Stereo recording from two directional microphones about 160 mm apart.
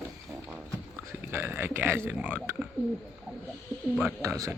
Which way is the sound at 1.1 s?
15° right (ahead or behind).